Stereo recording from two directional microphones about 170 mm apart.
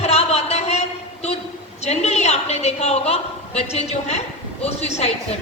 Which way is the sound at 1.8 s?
40° left (ahead or behind).